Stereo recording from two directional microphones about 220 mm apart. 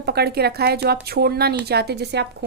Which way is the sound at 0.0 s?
45° right (ahead or behind).